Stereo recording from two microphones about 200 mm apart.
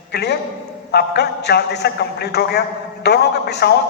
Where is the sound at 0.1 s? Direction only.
55° left (ahead or behind).